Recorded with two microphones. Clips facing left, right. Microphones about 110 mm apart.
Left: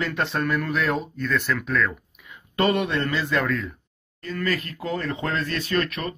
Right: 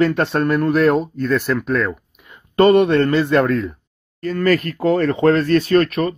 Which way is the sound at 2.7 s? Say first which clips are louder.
Right 11 dB; 60° right (ahead or behind).